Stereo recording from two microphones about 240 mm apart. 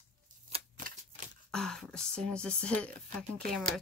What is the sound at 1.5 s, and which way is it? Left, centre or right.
Speech, centre.